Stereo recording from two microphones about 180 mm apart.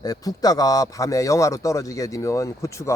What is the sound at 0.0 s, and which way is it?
A man's voice, 20° left (ahead or behind).